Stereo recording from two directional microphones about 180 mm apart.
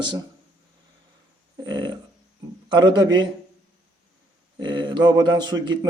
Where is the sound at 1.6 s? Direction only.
25° right (ahead or behind).